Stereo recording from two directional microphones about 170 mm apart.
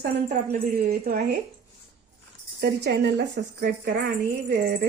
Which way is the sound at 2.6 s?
80° right.